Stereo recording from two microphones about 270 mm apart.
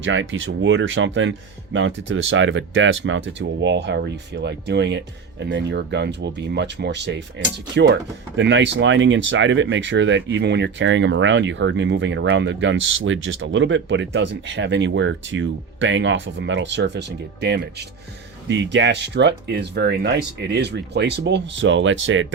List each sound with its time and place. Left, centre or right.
0.0 s speech: right